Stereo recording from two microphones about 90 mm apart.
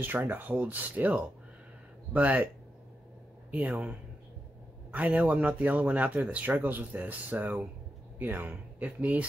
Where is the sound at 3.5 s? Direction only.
15° right (ahead or behind).